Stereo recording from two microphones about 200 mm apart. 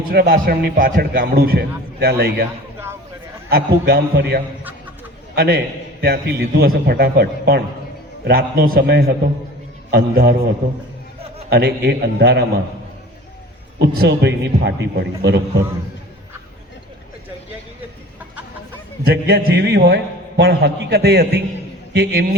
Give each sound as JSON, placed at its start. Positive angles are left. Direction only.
{"t": 0.1, "sound": "a man's voice", "side_deg": -50}
{"t": 3.5, "sound": "a man's voice", "side_deg": -55}
{"t": 11.4, "sound": "a man's voice", "side_deg": -55}
{"t": 13.7, "sound": "a man's voice", "side_deg": -55}
{"t": 19.0, "sound": "a man's voice", "side_deg": -50}